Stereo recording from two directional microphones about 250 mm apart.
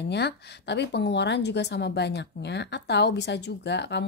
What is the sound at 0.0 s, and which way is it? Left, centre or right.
Speech, left.